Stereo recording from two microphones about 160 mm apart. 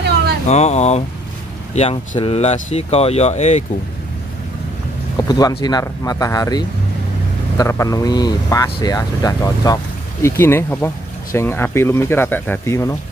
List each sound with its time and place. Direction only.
0.5 s speech: 45° left (ahead or behind)
5.1 s speech: 25° left (ahead or behind)